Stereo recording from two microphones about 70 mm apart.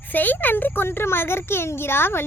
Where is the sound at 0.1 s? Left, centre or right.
Left.